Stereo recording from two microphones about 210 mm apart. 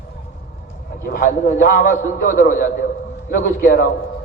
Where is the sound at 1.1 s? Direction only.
45° left (ahead or behind).